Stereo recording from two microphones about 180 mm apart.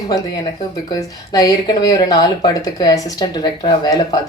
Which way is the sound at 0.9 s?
20° left (ahead or behind).